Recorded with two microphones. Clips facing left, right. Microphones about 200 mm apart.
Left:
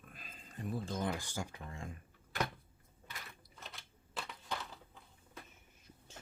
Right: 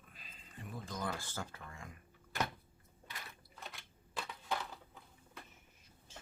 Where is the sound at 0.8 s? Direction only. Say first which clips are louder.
Right 1 dB; 25° left (ahead or behind).